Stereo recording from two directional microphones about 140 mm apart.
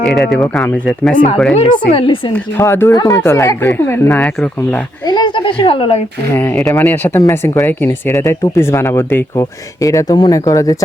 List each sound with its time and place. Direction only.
0.0 s speech: centre (ahead or behind)
1.5 s a woman's voice: 40° left (ahead or behind)
2.3 s speech: 15° left (ahead or behind)
4.1 s speech: 5° left (ahead or behind)
5.0 s speech: 35° left (ahead or behind)
6.3 s speech: 15° left (ahead or behind)